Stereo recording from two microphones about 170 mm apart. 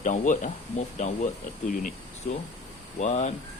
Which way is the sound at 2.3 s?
55° left (ahead or behind).